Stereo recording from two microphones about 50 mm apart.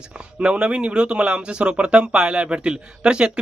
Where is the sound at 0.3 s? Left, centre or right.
Centre.